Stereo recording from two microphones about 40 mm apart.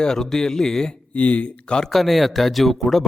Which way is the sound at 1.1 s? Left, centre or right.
Left.